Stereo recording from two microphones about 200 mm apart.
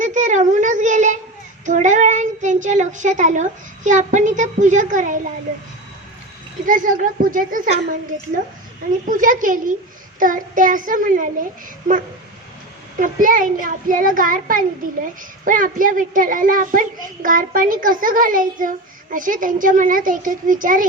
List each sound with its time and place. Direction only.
0.0 s a sound: 35° right (ahead or behind)
1.6 s child singing: 40° right (ahead or behind)
3.8 s a child's voice: 40° right (ahead or behind)
6.7 s a child's voice: 40° right (ahead or behind)
9.0 s a child's voice: 40° right (ahead or behind)
13.0 s a child's voice: 40° right (ahead or behind)